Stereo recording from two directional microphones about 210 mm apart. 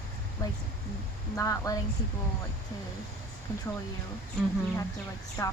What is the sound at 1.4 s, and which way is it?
Speech, 15° left (ahead or behind).